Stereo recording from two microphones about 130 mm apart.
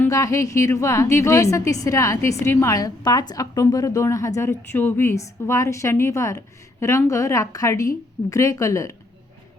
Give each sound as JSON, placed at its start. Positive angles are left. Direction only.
{"t": 0.1, "sound": "a woman's voice", "side_deg": 25}